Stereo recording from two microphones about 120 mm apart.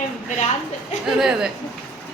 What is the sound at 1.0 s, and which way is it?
Speech, 5° right (ahead or behind).